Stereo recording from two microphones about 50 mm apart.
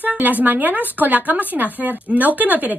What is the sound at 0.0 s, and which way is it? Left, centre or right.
A woman's voice, right.